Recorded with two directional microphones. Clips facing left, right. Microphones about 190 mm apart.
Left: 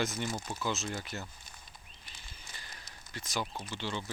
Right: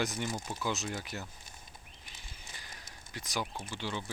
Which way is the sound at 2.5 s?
15° right (ahead or behind).